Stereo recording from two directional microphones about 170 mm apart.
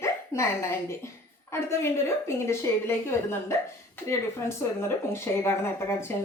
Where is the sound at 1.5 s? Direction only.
15° left (ahead or behind).